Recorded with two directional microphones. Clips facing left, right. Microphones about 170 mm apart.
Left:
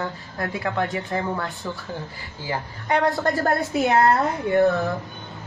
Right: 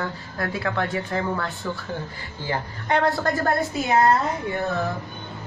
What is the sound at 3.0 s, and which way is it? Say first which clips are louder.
Speech: left 1 dB; 20° left (ahead or behind).